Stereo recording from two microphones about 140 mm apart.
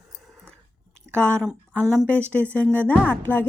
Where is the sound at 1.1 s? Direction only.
15° right (ahead or behind).